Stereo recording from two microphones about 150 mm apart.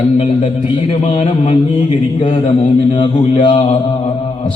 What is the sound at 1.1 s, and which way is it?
Speech, 50° left (ahead or behind).